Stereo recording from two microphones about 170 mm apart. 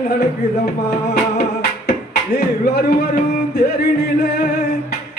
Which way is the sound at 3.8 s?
70° left (ahead or behind).